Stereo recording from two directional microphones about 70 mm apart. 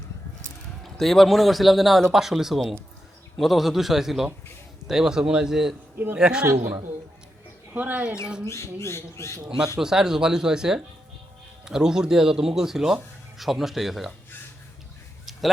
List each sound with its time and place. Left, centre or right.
0.9 s a man's voice: centre
7.7 s speech: right
8.2 s speech: centre
8.4 s speech: left
9.7 s a man's voice: centre
15.3 s a sound: centre